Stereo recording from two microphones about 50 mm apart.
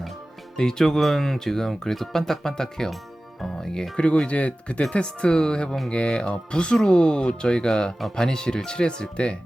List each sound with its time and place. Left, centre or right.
0.5 s speech: centre
3.9 s speech: left